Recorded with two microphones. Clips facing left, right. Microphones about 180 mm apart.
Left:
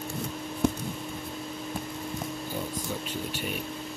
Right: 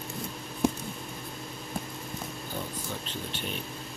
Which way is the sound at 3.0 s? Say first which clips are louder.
Left 3 dB; 10° left (ahead or behind).